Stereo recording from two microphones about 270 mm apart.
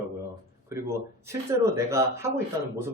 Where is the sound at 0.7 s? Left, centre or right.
Centre.